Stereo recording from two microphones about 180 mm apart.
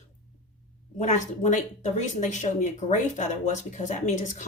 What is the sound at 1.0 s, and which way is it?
Speech, 45° left (ahead or behind).